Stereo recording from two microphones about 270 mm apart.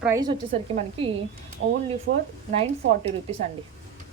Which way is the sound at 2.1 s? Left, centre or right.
Right.